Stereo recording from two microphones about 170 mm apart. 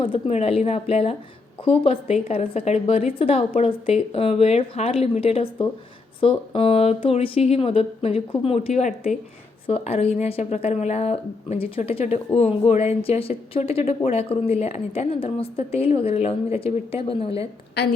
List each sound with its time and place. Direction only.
0.0 s speech: 35° left (ahead or behind)